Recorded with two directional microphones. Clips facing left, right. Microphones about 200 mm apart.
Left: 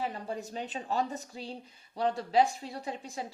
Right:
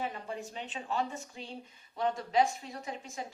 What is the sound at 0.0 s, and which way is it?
A woman's voice, 35° left (ahead or behind).